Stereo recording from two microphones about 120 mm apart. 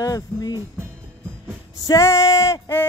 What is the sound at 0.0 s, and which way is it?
Speech, 30° left (ahead or behind).